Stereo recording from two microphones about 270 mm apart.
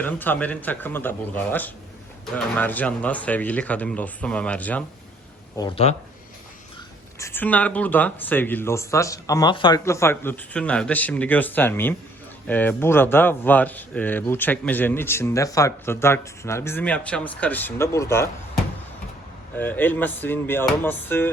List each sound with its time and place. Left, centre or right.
0.0 s speech: centre
5.5 s speech: centre
7.2 s speech: centre